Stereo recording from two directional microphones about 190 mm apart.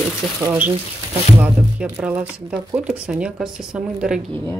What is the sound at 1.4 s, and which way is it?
Speech, 5° right (ahead or behind).